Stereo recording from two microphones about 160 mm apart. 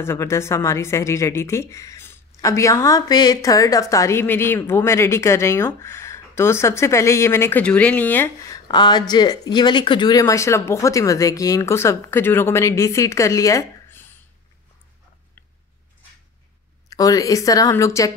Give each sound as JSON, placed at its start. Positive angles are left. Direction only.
{"t": 0.0, "sound": "a woman's voice", "side_deg": 15}
{"t": 16.9, "sound": "speech", "side_deg": 20}